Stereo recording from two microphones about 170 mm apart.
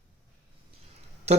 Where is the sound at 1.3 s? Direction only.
40° right (ahead or behind).